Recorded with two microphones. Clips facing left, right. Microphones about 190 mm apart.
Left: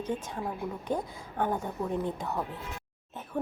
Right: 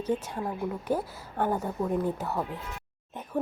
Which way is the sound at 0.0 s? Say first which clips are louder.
Right 3 dB; 10° right (ahead or behind).